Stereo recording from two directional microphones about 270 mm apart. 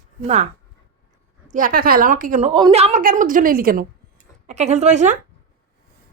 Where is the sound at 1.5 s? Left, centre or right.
Right.